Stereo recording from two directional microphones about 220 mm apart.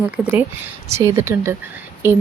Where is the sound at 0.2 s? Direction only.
5° right (ahead or behind).